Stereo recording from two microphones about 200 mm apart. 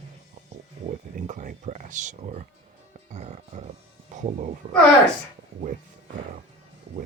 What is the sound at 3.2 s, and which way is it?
Music, 30° right (ahead or behind).